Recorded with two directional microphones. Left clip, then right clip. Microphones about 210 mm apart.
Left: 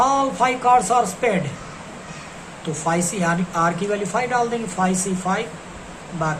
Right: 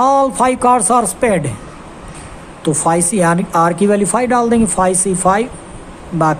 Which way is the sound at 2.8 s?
55° right (ahead or behind).